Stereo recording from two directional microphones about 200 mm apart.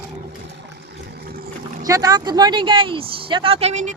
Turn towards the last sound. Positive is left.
turn(degrees=-35)  # may be behind; listen again after turning